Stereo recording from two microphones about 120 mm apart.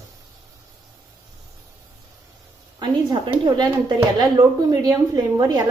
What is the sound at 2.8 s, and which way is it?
Speech, 40° right (ahead or behind).